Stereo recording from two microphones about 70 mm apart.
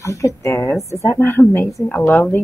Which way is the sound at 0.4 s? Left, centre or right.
Left.